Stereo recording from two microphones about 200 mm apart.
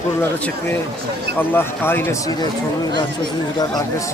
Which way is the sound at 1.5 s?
10° left (ahead or behind).